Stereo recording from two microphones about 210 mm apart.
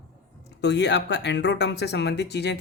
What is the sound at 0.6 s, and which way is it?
A man's voice, 55° left (ahead or behind).